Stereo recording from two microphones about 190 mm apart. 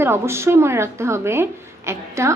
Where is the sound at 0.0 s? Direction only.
15° right (ahead or behind).